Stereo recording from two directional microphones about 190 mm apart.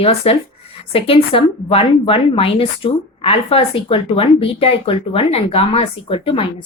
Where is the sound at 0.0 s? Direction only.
30° left (ahead or behind).